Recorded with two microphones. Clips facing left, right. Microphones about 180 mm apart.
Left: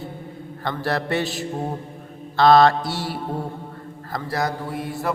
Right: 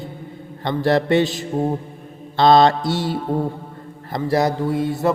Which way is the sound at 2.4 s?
20° right (ahead or behind).